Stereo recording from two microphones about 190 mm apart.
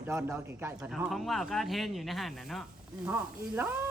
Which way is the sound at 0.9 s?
Centre (ahead or behind).